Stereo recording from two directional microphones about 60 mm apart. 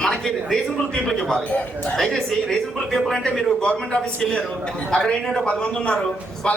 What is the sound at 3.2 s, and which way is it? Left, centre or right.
A man's voice, centre.